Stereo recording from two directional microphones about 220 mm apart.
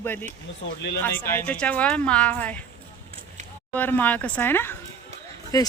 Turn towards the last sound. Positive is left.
turn(degrees=15)  # may be behind; listen again after turning